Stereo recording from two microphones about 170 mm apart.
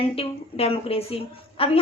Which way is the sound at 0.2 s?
35° left (ahead or behind).